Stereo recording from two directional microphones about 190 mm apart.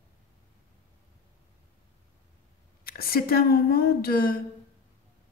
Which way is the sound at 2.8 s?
50° left (ahead or behind).